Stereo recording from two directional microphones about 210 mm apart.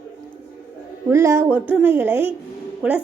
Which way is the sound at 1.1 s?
10° right (ahead or behind).